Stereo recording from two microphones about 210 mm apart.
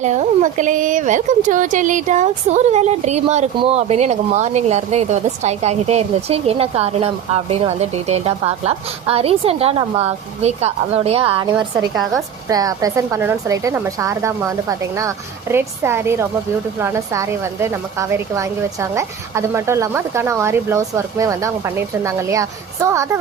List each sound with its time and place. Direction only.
0.0 s speech: 35° right (ahead or behind)
12.5 s speech: 15° right (ahead or behind)